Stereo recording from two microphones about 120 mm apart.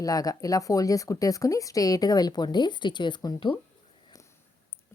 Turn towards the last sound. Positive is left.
turn(degrees=25)  # may be behind; listen again after turning